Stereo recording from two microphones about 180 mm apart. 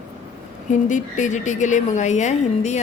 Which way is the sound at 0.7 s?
45° left (ahead or behind).